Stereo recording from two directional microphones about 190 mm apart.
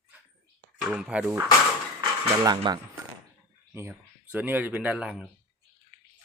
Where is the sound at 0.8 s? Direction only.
5° right (ahead or behind).